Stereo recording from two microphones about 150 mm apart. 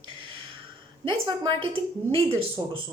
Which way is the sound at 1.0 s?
35° right (ahead or behind).